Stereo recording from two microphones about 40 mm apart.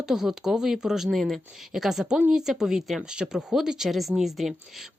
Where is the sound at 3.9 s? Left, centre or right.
Centre.